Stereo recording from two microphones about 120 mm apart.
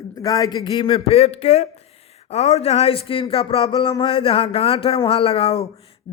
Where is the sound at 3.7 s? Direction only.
40° left (ahead or behind).